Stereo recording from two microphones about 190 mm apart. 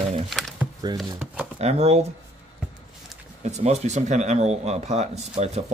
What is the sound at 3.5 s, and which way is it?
Speech, 35° right (ahead or behind).